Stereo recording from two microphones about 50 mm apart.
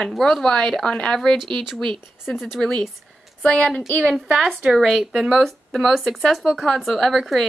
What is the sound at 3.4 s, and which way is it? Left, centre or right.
Speech, centre.